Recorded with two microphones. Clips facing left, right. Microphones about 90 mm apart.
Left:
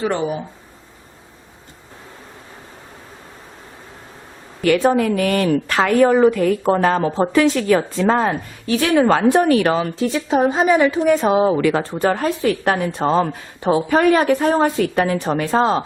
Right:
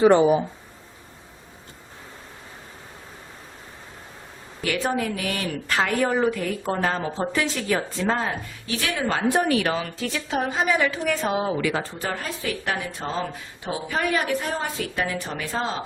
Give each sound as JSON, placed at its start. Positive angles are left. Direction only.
{"t": 0.0, "sound": "speech", "side_deg": -15}
{"t": 4.8, "sound": "a woman's voice", "side_deg": 60}
{"t": 8.1, "sound": "a woman's voice", "side_deg": 50}
{"t": 9.6, "sound": "speech", "side_deg": 40}
{"t": 10.0, "sound": "a woman's voice", "side_deg": 25}
{"t": 11.4, "sound": "a woman's voice", "side_deg": 45}
{"t": 12.5, "sound": "a woman's voice", "side_deg": 40}